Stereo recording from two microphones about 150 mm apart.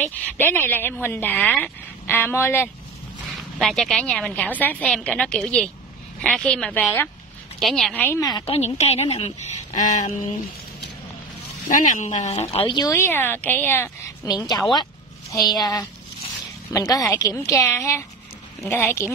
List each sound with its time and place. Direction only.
0.0 s a woman's voice: 15° left (ahead or behind)
3.3 s a woman's voice: centre (ahead or behind)
8.2 s a woman's voice: 25° left (ahead or behind)
8.5 s a woman's voice: 45° left (ahead or behind)
11.7 s a woman's voice: 55° left (ahead or behind)
12.6 s a woman's voice: 30° left (ahead or behind)
12.9 s a woman's voice: 15° left (ahead or behind)
14.2 s a woman's voice: 25° left (ahead or behind)